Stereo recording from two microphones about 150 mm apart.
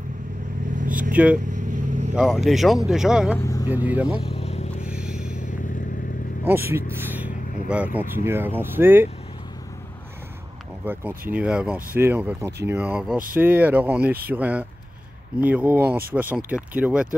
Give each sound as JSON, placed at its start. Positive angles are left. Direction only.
{"t": 0.7, "sound": "vehicle", "side_deg": -60}
{"t": 1.1, "sound": "speech", "side_deg": -10}
{"t": 1.5, "sound": "vehicle", "side_deg": -55}
{"t": 2.1, "sound": "speech", "side_deg": 0}
{"t": 4.2, "sound": "vehicle", "side_deg": 45}
{"t": 4.8, "sound": "a sound", "side_deg": -5}
{"t": 6.4, "sound": "speech", "side_deg": -15}
{"t": 10.9, "sound": "speech", "side_deg": -10}